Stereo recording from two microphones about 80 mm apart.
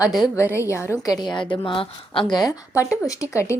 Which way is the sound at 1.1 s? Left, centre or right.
Left.